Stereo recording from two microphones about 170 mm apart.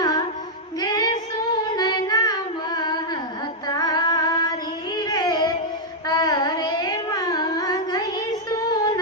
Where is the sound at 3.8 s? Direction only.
20° left (ahead or behind).